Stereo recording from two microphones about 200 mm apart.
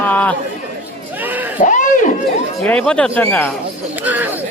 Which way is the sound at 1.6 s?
40° left (ahead or behind).